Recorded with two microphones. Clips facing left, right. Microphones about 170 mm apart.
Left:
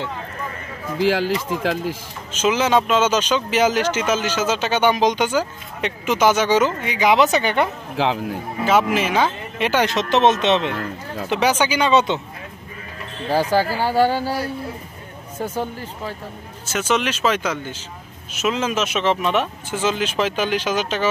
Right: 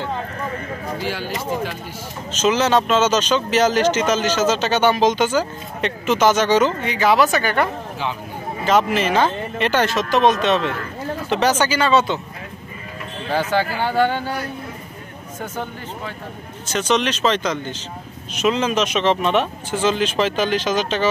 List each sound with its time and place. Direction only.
0.9 s speech: 90° left
2.3 s speech: 10° left (ahead or behind)
8.0 s speech: 90° left
8.9 s speech: 10° left (ahead or behind)
11.2 s speech: 10° left (ahead or behind)
13.3 s speech: 35° left (ahead or behind)
16.6 s speech: 5° left (ahead or behind)